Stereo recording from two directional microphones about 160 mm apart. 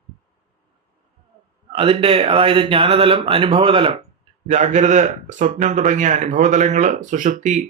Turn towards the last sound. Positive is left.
turn(degrees=-50)  # may be behind; listen again after turning